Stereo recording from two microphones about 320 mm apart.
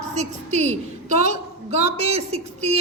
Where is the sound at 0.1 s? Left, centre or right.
Right.